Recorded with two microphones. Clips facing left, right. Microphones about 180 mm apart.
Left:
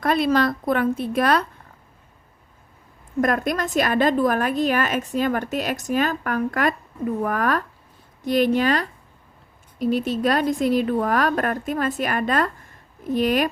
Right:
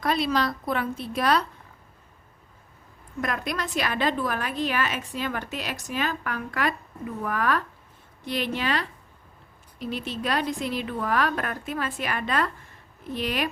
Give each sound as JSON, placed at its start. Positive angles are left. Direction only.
{"t": 0.0, "sound": "a woman's voice", "side_deg": 50}
{"t": 3.2, "sound": "a woman's voice", "side_deg": 45}